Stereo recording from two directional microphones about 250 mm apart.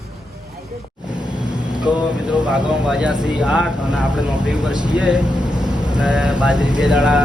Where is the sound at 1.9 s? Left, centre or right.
Centre.